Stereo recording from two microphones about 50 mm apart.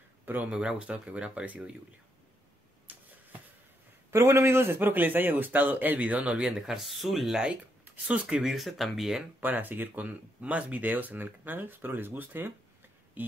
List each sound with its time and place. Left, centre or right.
0.2 s a sound: right
0.5 s speech: right
2.9 s a sound: right
4.1 s a man's voice: right
4.7 s speech: right
6.6 s speech: centre
8.1 s speech: right
8.5 s speech: centre
9.4 s speech: right